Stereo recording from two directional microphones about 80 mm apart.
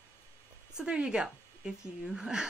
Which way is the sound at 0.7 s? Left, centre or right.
Centre.